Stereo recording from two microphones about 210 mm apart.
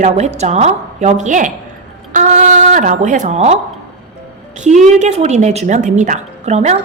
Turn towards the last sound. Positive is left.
turn(degrees=-30)  # may be behind; listen again after turning